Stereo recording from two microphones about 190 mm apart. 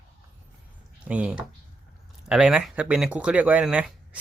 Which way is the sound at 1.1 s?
5° right (ahead or behind).